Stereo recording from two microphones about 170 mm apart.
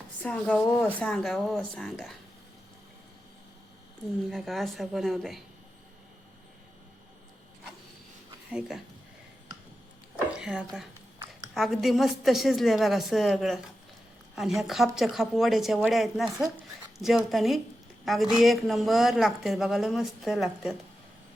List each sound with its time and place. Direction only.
0.2 s speech: 10° left (ahead or behind)
4.3 s speech: centre (ahead or behind)
8.4 s speech: 5° right (ahead or behind)
10.3 s speech: 5° right (ahead or behind)